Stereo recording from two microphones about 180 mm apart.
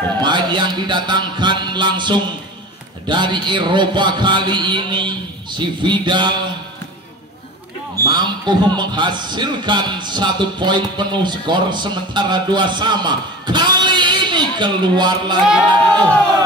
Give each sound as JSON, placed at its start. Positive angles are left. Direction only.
{"t": 0.2, "sound": "a man's voice", "side_deg": -25}
{"t": 8.0, "sound": "a man's voice", "side_deg": -25}